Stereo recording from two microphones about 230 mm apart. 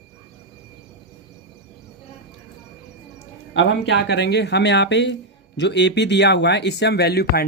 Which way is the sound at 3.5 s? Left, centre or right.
Left.